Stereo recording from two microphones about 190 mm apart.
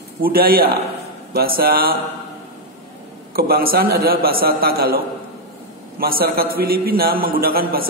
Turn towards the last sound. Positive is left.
turn(degrees=-50)  # may be behind; listen again after turning